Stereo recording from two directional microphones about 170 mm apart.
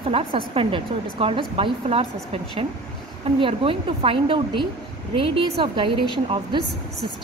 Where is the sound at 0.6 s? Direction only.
30° right (ahead or behind).